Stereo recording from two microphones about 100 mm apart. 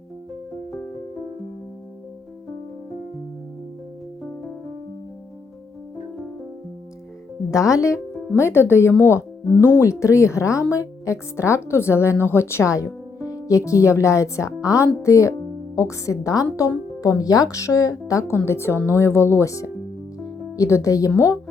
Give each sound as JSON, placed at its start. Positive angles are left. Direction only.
{"t": 7.7, "sound": "speech", "side_deg": 30}
{"t": 18.3, "sound": "speech", "side_deg": 25}
{"t": 20.2, "sound": "music", "side_deg": 30}